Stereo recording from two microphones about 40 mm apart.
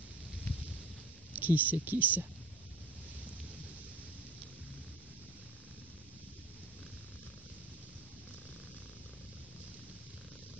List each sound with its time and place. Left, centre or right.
1.3 s speech: right